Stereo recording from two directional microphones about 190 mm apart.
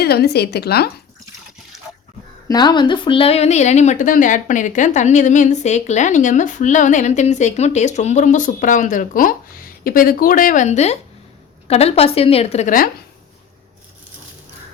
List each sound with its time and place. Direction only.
0.0 s a woman's voice: 60° left (ahead or behind)
2.5 s speech: 20° left (ahead or behind); by 12.9 s 45° left (ahead or behind)